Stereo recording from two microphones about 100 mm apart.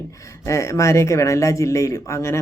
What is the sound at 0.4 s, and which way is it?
Speech, 30° left (ahead or behind).